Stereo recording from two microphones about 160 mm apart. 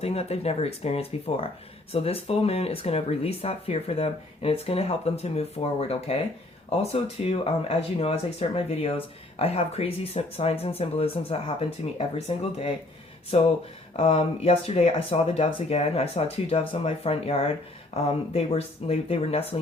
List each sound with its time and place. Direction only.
0.0 s speech: 40° left (ahead or behind)